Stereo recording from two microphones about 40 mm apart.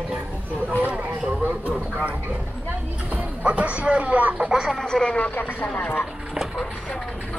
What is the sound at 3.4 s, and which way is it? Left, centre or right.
Speech, right.